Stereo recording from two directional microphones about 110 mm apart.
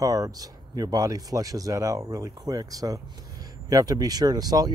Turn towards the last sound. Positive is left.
turn(degrees=-35)  # may be behind; listen again after turning